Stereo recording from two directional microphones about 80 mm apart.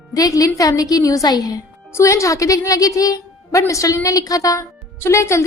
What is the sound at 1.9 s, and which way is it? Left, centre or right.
A woman's voice, left.